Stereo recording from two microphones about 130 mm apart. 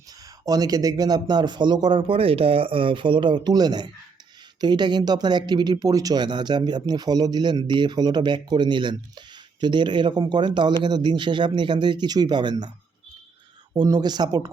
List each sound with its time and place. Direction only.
0.4 s speech: 30° right (ahead or behind)
13.7 s speech: 30° right (ahead or behind)